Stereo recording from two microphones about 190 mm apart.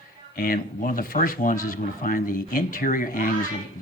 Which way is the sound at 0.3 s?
50° left (ahead or behind).